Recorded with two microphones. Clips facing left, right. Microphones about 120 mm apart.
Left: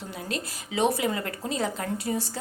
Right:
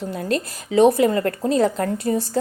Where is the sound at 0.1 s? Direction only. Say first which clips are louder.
Right 9 dB; 50° right (ahead or behind).